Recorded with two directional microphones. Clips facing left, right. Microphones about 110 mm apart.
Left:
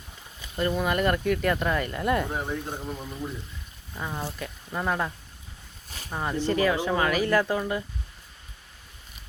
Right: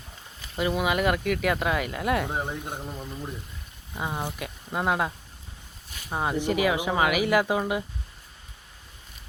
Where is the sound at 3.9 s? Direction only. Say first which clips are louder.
Right 2 dB; 20° right (ahead or behind).